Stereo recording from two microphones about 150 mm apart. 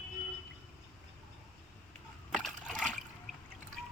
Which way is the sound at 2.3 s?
Centre (ahead or behind).